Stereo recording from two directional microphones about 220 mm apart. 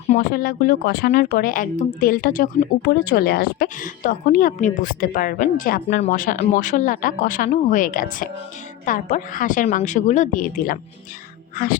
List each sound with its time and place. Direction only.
0.1 s speech: 40° left (ahead or behind)